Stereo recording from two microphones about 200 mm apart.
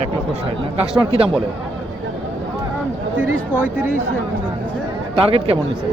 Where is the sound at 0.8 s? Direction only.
30° right (ahead or behind).